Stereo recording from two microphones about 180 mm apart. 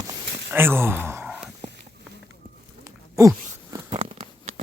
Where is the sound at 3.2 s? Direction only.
20° right (ahead or behind).